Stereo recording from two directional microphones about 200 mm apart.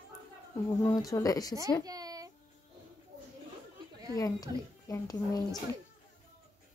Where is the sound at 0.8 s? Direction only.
15° left (ahead or behind).